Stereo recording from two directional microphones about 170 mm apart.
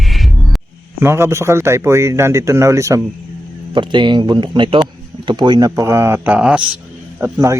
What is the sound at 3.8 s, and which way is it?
A man's voice, 25° right (ahead or behind).